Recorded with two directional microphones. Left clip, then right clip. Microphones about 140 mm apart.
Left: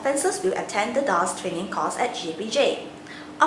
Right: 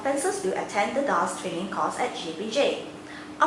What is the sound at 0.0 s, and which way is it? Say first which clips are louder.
Speech: left 3 dB; 25° left (ahead or behind).